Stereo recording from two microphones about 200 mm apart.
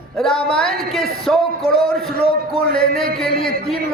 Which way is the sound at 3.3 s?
50° left (ahead or behind).